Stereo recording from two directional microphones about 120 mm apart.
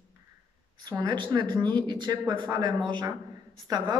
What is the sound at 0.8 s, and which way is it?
Speech, 35° right (ahead or behind).